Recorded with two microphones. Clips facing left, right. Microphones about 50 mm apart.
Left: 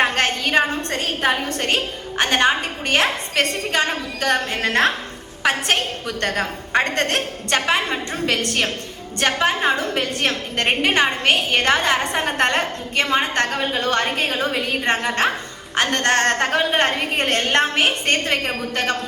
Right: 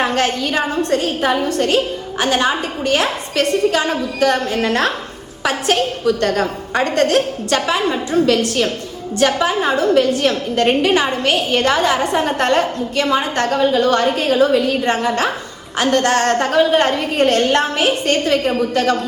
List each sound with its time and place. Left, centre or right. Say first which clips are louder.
0.0 s a sound: right 2 dB; left
0.8 s a woman's voice: right 6 dB; left
13.6 s a woman's voice: right 8 dB; left
13.8 s a woman's voice: right 5 dB; left
14.3 s a woman's voice: right 9 dB; left
14.8 s a woman's voice: right 2 dB; left